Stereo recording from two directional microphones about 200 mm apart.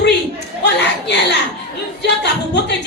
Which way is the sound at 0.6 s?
60° left (ahead or behind).